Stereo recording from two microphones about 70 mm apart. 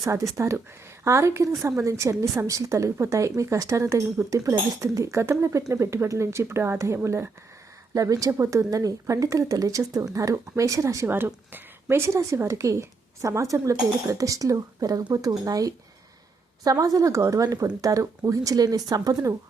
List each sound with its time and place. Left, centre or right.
0.0 s a woman's voice: right
7.9 s a woman's voice: right
11.0 s a woman's voice: right
16.8 s speech: right